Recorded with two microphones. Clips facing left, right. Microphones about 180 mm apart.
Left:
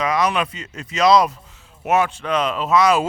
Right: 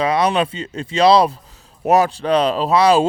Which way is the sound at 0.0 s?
30° right (ahead or behind).